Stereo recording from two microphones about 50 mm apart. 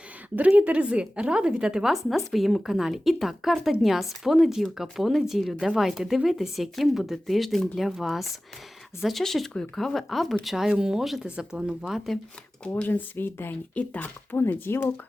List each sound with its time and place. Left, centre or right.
0.3 s speech: right; by 1.9 s centre
1.9 s speech: centre
11.3 s speech: centre
11.8 s speech: centre
12.6 s speech: left
13.1 s speech: left
13.7 s speech: left
14.5 s speech: left